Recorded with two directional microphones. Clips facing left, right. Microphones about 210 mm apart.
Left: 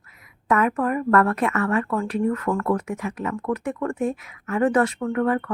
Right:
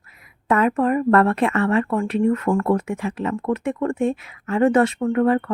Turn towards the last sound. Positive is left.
turn(degrees=-25)  # may be behind; listen again after turning